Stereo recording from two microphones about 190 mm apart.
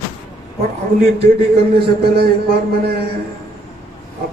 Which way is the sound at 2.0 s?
55° right (ahead or behind).